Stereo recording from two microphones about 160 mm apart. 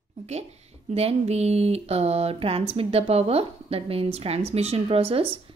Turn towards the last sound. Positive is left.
turn(degrees=-35)  # may be behind; listen again after turning